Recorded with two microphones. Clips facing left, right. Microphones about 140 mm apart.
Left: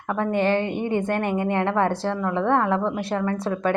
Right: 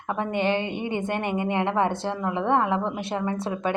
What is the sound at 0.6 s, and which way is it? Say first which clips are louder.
Speech: left 4 dB; 45° left (ahead or behind).